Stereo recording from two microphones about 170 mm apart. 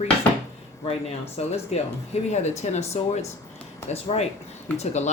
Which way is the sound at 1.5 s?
40° left (ahead or behind).